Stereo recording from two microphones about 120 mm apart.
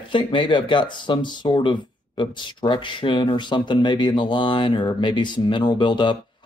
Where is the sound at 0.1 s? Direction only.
45° left (ahead or behind).